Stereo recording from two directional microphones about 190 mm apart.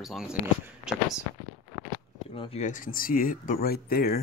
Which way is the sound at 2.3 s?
30° left (ahead or behind).